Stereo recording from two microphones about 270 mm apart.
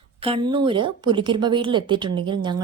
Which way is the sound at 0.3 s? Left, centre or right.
Centre.